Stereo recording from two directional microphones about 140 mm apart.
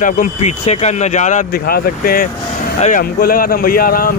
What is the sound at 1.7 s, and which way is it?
Speech, 90° left.